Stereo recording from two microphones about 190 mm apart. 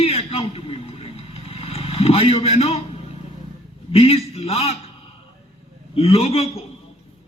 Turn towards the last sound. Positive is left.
turn(degrees=30)  # may be behind; listen again after turning